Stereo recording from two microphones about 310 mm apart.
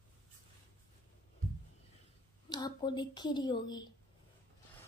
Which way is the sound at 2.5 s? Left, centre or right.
Centre.